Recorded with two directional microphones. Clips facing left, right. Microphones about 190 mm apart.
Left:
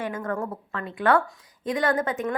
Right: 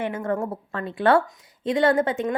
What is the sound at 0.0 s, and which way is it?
A woman's voice, 25° right (ahead or behind).